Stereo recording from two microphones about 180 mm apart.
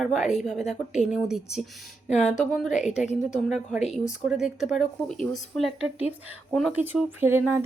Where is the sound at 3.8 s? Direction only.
40° left (ahead or behind).